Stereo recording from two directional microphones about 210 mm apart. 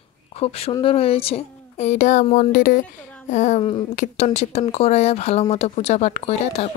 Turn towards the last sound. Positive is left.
turn(degrees=30)  # may be behind; listen again after turning